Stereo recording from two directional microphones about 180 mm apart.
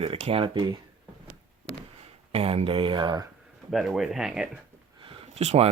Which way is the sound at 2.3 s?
35° right (ahead or behind).